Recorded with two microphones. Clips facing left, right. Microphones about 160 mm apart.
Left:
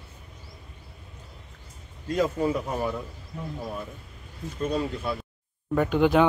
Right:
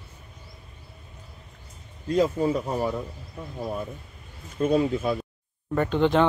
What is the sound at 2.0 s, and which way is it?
A man's voice, 25° right (ahead or behind).